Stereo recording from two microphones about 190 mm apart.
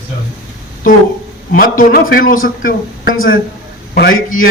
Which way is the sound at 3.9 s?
60° left (ahead or behind).